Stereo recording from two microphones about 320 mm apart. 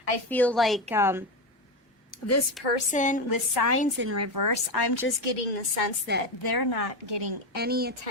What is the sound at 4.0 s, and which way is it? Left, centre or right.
Speech, right.